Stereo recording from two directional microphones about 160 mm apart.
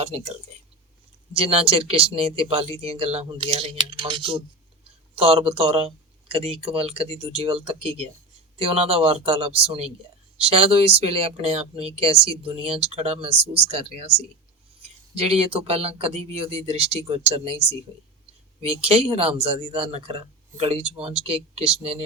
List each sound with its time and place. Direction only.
0.0 s speech: 40° right (ahead or behind)